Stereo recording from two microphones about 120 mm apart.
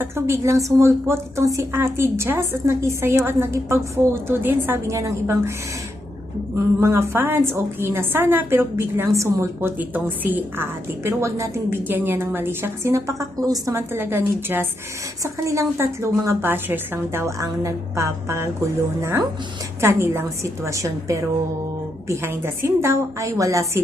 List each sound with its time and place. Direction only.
0.0 s a woman's voice: 25° right (ahead or behind)
6.7 s a woman's voice: 25° right (ahead or behind)
19.8 s a woman's voice: 20° right (ahead or behind)